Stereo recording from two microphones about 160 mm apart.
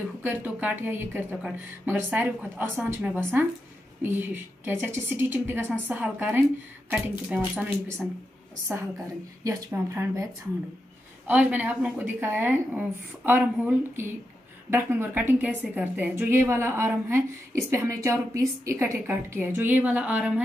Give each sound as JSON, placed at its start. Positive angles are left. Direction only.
{"t": 0.2, "sound": "a woman's voice", "side_deg": -10}
{"t": 9.7, "sound": "a woman's voice", "side_deg": -15}
{"t": 11.2, "sound": "a woman's voice", "side_deg": -10}